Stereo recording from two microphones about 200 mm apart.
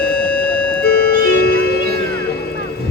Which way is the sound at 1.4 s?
50° left (ahead or behind).